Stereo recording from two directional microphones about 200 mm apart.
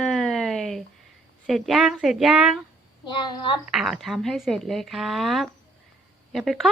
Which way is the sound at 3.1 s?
20° left (ahead or behind).